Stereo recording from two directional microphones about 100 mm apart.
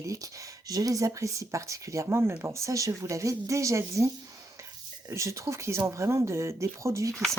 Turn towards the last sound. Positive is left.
turn(degrees=5)  # may be behind; listen again after turning